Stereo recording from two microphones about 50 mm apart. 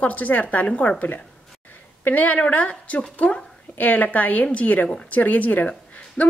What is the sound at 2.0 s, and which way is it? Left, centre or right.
A woman's voice, left.